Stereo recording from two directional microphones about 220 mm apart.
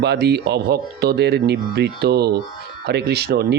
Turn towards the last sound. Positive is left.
turn(degrees=-50)  # may be behind; listen again after turning